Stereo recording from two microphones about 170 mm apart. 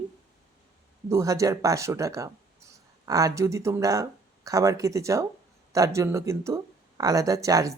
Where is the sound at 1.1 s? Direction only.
20° right (ahead or behind).